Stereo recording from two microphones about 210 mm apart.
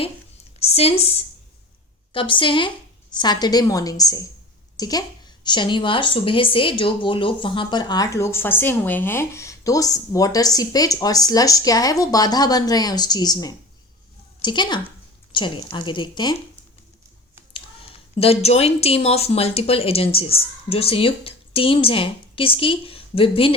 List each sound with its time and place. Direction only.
0.6 s a sound: 30° left (ahead or behind)
2.1 s a woman's voice: 25° left (ahead or behind)
18.2 s a woman's voice: 30° left (ahead or behind)